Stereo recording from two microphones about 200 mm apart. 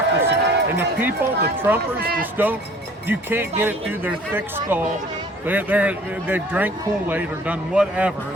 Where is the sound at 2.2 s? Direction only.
10° right (ahead or behind).